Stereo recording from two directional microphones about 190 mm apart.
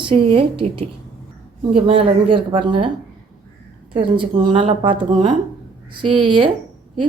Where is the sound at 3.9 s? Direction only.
25° right (ahead or behind).